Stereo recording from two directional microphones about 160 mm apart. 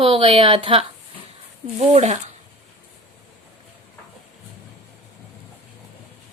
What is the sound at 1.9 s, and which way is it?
Speech, 45° right (ahead or behind).